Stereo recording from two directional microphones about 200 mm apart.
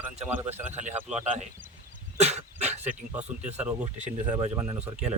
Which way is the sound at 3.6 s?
5° right (ahead or behind).